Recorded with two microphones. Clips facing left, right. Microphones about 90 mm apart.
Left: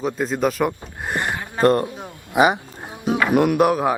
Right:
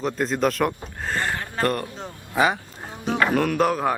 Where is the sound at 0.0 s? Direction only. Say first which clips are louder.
Left 1 dB; 5° left (ahead or behind).